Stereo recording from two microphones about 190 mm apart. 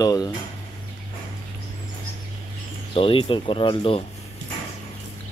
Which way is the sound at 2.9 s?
30° left (ahead or behind).